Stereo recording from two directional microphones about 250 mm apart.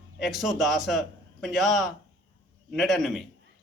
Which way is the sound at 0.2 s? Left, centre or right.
Centre.